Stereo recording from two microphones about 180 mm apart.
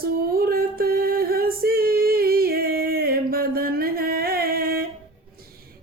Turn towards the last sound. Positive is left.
turn(degrees=-55)  # may be behind; listen again after turning